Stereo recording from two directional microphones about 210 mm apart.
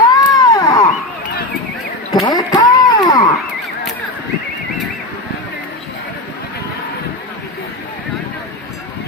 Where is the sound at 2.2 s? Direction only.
20° left (ahead or behind).